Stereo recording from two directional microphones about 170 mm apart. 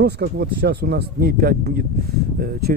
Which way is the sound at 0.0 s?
75° right (ahead or behind).